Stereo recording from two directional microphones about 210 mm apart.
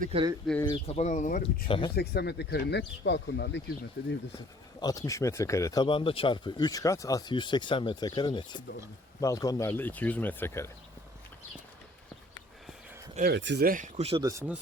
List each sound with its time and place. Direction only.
0.0 s speech: 30° right (ahead or behind)
0.6 s speech: 25° left (ahead or behind)
1.6 s speech: 25° left (ahead or behind)
2.0 s speech: 50° left (ahead or behind)
4.8 s speech: 15° left (ahead or behind)
13.1 s speech: 50° right (ahead or behind); by 14.3 s 30° right (ahead or behind)
14.3 s speech: 10° right (ahead or behind)